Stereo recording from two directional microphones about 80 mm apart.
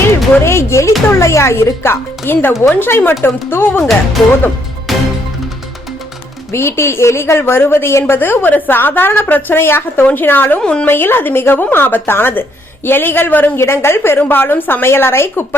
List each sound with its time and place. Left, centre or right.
0.4 s speech: left
4.9 s music: centre
6.5 s speech: left
10.6 s a woman's voice: centre
10.8 s speech: left